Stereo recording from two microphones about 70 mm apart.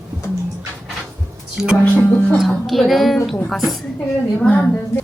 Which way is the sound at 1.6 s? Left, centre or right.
Centre.